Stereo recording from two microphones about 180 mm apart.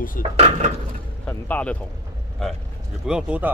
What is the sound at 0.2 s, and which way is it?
Speech, 50° left (ahead or behind).